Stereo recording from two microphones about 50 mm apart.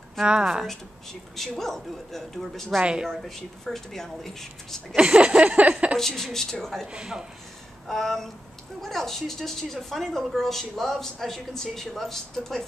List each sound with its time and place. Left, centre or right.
0.2 s speech: centre
1.6 s speech: centre
2.8 s a sound: centre
3.1 s a woman's voice: centre
4.9 s a sound: centre
5.9 s a woman's voice: centre
6.9 s speech: centre
7.9 s a woman's voice: centre